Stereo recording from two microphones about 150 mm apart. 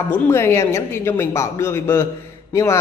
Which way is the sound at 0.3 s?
20° left (ahead or behind).